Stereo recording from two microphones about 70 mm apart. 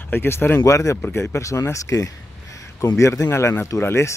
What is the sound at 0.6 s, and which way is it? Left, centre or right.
Speech, left.